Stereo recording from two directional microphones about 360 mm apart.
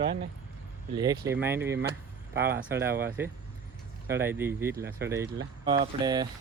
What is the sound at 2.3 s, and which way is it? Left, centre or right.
Speech, right.